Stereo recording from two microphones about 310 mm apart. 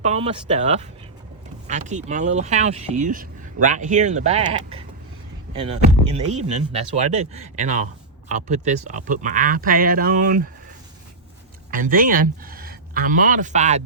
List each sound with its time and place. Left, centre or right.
0.0 s speech: right
11.7 s speech: right